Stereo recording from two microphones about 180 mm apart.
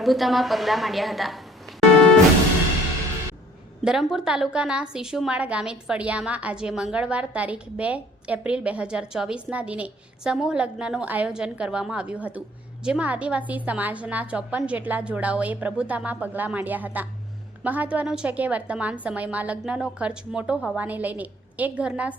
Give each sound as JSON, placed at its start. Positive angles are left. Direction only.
{"t": 0.0, "sound": "a woman's voice", "side_deg": 0}
{"t": 3.8, "sound": "a woman's voice", "side_deg": 0}